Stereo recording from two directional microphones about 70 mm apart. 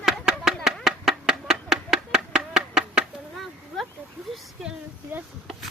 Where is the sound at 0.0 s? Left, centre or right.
Centre.